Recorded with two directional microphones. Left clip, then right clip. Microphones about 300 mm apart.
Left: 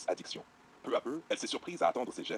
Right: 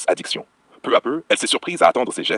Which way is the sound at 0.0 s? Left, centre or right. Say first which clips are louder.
Right 16 dB; right.